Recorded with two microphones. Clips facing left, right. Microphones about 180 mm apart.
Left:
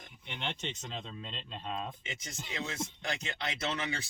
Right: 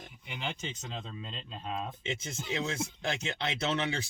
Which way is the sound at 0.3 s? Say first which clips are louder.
Right 1 dB; 5° right (ahead or behind).